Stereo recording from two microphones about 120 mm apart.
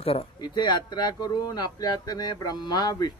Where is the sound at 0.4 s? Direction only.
35° left (ahead or behind).